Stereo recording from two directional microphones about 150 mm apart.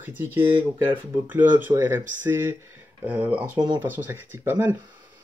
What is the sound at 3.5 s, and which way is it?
Speech, 30° right (ahead or behind).